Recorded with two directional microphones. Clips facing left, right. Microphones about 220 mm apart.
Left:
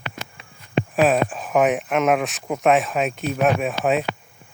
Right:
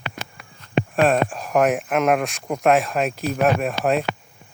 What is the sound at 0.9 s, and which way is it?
Speech, centre (ahead or behind).